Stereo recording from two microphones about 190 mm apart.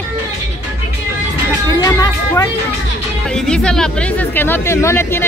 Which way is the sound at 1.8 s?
15° left (ahead or behind).